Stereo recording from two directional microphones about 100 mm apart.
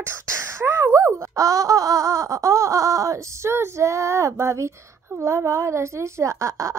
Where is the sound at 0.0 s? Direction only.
30° right (ahead or behind).